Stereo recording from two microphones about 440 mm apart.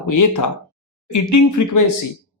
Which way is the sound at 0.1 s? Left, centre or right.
Left.